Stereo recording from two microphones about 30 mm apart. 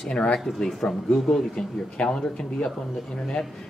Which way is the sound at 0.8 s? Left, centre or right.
Left.